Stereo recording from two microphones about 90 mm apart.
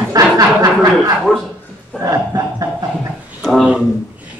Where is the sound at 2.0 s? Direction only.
40° right (ahead or behind).